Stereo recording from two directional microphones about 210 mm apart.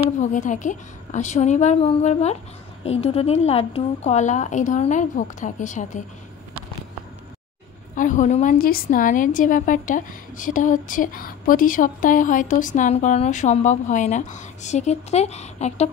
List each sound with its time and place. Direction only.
0.2 s a woman's voice: 35° left (ahead or behind)
7.9 s a woman's voice: 35° left (ahead or behind)